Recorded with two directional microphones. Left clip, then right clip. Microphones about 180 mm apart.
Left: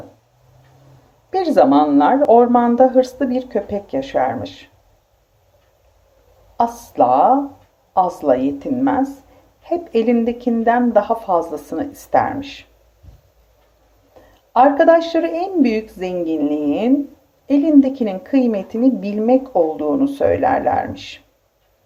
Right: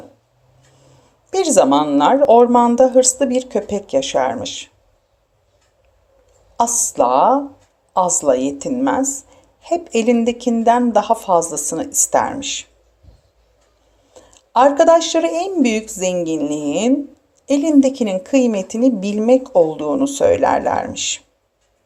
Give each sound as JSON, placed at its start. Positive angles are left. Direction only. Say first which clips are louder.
{"t": 1.3, "sound": "a woman's voice", "louder": "even", "side_deg": -20}
{"t": 6.6, "sound": "a woman's voice", "louder": "even", "side_deg": -20}
{"t": 14.5, "sound": "a woman's voice", "louder": "even", "side_deg": -20}